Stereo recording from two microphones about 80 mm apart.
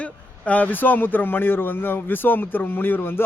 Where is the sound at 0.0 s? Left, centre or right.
Centre.